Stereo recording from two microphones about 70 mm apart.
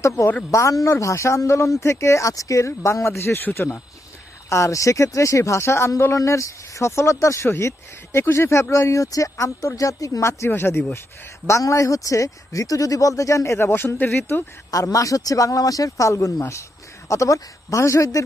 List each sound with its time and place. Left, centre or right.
0.0 s speech: left
4.5 s speech: left
6.1 s speech: left
11.4 s speech: left
14.7 s speech: left